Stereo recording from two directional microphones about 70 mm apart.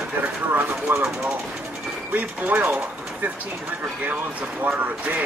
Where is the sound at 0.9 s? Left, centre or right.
Right.